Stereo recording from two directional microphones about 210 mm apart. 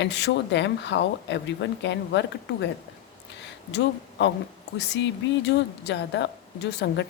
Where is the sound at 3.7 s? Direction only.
60° left (ahead or behind).